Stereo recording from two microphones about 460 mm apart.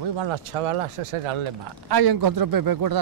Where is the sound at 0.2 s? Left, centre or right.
Right.